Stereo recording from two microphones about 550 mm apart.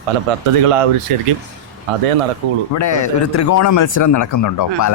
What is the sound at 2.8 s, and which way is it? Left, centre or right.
Speech, left.